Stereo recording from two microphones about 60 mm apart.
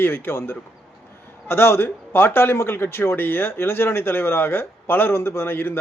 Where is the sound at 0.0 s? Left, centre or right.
Left.